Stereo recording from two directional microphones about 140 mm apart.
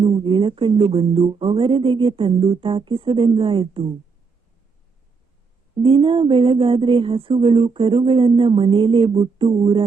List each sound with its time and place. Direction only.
0.0 s speech: 35° right (ahead or behind)
5.7 s speech: 40° right (ahead or behind)